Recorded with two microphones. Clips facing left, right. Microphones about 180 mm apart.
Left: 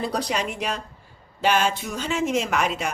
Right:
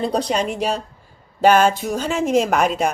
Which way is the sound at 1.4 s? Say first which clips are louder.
Right 8 dB; 45° right (ahead or behind).